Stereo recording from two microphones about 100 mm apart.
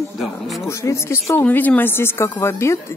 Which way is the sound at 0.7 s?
25° left (ahead or behind).